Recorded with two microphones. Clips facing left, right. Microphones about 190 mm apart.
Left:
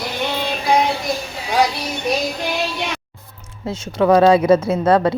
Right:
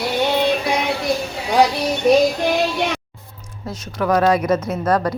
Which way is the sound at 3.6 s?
25° left (ahead or behind).